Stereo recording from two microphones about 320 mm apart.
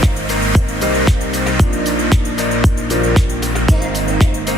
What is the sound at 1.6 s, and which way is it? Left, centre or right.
Music, centre.